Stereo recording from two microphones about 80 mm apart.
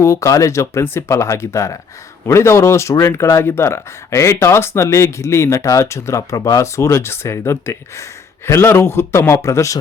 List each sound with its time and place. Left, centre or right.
0.0 s speech: left